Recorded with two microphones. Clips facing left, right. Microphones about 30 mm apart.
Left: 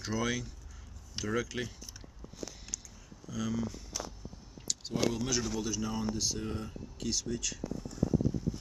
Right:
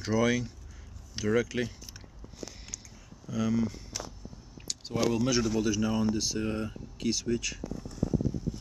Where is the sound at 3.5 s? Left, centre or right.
Right.